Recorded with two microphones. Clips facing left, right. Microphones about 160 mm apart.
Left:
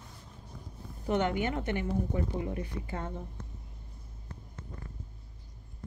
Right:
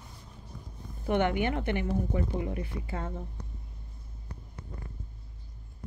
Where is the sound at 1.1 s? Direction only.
20° right (ahead or behind).